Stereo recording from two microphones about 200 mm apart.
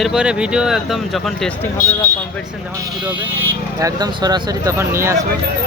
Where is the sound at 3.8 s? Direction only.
20° right (ahead or behind).